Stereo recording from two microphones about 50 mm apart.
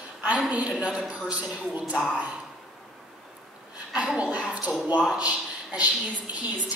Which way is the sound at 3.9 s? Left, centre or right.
Right.